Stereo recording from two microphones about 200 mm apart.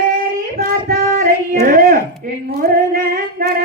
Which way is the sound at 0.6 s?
40° right (ahead or behind).